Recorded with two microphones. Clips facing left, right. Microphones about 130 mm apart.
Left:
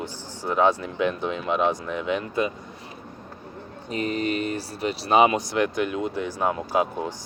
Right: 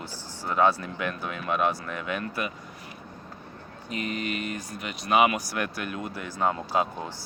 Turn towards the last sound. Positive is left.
turn(degrees=15)  # may be behind; listen again after turning